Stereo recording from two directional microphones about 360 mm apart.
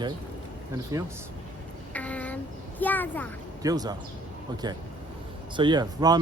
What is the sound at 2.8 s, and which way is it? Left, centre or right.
Speech, centre.